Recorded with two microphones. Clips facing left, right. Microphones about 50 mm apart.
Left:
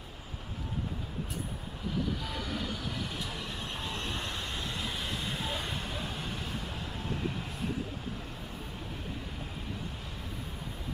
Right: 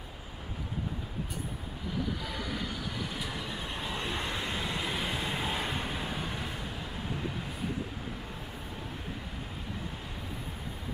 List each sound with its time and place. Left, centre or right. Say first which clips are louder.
2.2 s vehicle: even; centre